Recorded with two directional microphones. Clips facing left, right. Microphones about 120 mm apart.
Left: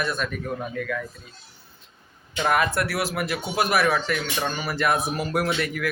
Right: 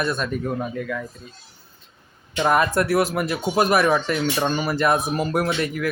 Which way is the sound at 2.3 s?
30° right (ahead or behind).